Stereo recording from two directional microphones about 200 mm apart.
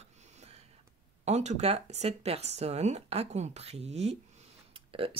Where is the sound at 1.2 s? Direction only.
35° right (ahead or behind).